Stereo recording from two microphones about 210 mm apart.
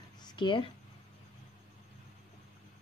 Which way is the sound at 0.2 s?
20° left (ahead or behind).